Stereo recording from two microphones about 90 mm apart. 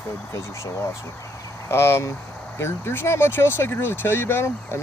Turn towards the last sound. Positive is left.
turn(degrees=30)  # may be behind; listen again after turning